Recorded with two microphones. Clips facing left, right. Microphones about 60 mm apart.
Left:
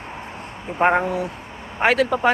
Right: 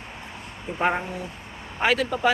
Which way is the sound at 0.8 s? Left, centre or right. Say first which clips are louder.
Left 7 dB; left.